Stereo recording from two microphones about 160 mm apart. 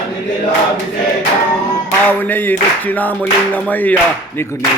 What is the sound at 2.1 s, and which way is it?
Music, 10° left (ahead or behind).